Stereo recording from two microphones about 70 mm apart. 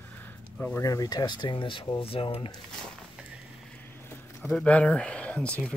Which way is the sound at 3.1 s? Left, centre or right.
Centre.